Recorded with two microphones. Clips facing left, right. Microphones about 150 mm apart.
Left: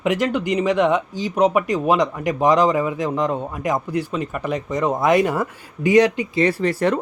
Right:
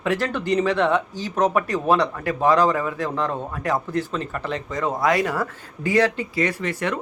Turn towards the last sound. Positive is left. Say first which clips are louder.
# left 6 dB
turn(degrees=35)  # may be behind; listen again after turning